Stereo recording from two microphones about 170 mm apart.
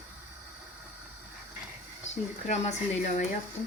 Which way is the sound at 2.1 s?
40° left (ahead or behind).